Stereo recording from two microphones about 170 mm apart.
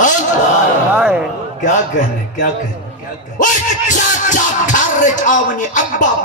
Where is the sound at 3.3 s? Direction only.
50° left (ahead or behind).